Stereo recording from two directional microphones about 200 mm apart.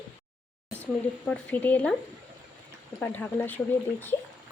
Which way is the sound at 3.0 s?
5° left (ahead or behind).